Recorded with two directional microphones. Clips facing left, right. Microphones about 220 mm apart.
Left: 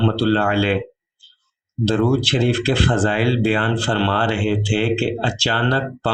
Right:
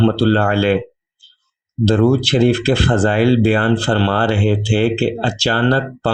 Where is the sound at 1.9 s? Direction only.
40° right (ahead or behind).